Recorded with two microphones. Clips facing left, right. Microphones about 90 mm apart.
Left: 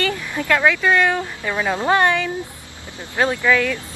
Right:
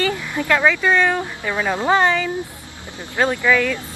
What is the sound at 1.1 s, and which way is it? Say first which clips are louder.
Speech: even; 15° right (ahead or behind).